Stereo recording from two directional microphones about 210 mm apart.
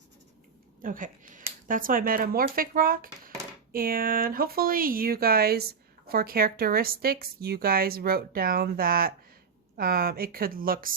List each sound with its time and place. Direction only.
0.8 s speech: 40° right (ahead or behind)